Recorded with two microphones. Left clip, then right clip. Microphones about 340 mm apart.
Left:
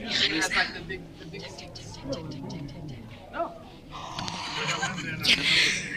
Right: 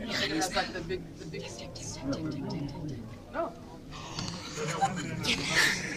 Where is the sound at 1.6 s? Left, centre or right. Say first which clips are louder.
Right 1 dB; centre.